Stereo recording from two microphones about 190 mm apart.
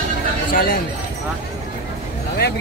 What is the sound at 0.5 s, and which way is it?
Speech, 50° left (ahead or behind).